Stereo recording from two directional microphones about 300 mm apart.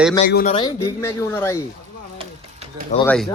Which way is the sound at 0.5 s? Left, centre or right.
Centre.